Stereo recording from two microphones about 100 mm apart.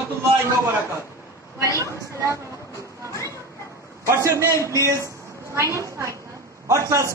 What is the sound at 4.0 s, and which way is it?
A man's voice, 30° right (ahead or behind).